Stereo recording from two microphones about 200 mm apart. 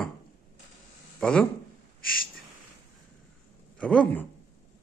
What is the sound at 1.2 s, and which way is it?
Speech, 5° left (ahead or behind).